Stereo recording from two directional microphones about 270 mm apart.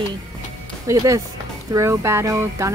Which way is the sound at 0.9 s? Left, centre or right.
Centre.